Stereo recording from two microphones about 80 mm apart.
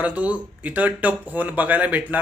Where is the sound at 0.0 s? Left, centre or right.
Centre.